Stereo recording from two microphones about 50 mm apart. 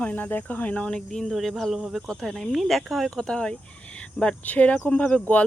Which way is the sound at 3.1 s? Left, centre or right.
Centre.